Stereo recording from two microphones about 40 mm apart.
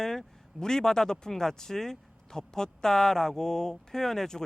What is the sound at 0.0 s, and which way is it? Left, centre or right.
A man's voice, centre.